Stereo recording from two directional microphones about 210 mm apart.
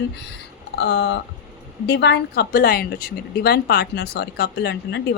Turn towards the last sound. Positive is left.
turn(degrees=50)  # may be behind; listen again after turning